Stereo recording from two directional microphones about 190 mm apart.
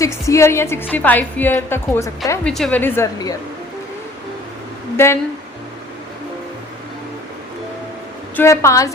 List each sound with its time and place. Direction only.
0.0 s a woman's voice: 15° left (ahead or behind)
2.5 s a woman's voice: 5° left (ahead or behind)
5.0 s a woman's voice: 15° left (ahead or behind)
8.4 s a woman's voice: 15° left (ahead or behind)